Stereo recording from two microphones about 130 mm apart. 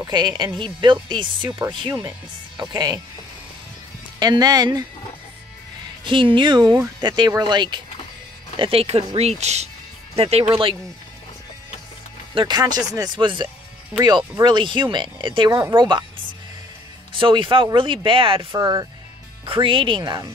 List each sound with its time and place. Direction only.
0.0 s speech: 35° right (ahead or behind)
4.2 s speech: 30° right (ahead or behind)
6.0 s speech: 40° right (ahead or behind)
12.4 s speech: 35° right (ahead or behind)
17.1 s speech: 40° right (ahead or behind)
19.4 s speech: 45° right (ahead or behind)